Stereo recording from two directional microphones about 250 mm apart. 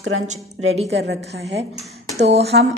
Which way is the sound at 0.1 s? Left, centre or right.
Right.